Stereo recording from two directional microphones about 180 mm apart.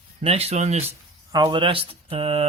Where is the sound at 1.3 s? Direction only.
25° right (ahead or behind).